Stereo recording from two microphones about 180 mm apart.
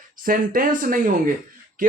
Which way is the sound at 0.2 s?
50° right (ahead or behind).